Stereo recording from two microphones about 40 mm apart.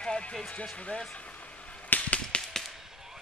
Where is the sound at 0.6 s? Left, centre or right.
Left.